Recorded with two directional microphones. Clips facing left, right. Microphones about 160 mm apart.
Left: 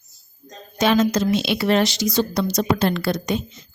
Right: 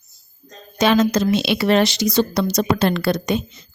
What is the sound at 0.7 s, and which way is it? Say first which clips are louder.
A woman's voice: right 2 dB; 80° right.